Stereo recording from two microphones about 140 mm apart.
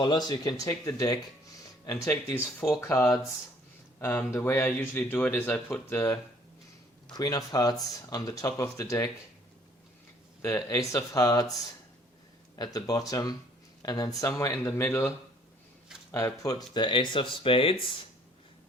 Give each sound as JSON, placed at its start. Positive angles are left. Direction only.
{"t": 0.0, "sound": "speech", "side_deg": 30}
{"t": 4.0, "sound": "speech", "side_deg": 15}
{"t": 7.1, "sound": "speech", "side_deg": 25}
{"t": 10.4, "sound": "speech", "side_deg": 20}
{"t": 12.5, "sound": "speech", "side_deg": 25}
{"t": 16.1, "sound": "speech", "side_deg": 20}